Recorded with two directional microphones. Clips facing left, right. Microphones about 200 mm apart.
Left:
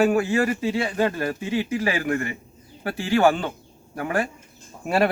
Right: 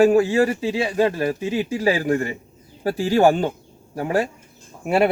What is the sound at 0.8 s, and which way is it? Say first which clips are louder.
Speech: right 7 dB; 15° right (ahead or behind).